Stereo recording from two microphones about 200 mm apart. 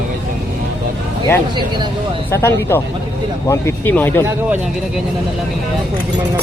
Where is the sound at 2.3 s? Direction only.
10° left (ahead or behind).